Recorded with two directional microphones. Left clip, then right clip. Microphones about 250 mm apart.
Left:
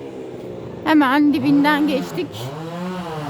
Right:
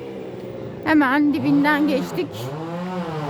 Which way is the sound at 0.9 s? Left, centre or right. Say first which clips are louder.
Left 2 dB; centre.